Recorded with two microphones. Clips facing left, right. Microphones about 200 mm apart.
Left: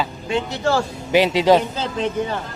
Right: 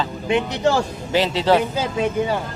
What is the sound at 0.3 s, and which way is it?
Speech, 20° right (ahead or behind).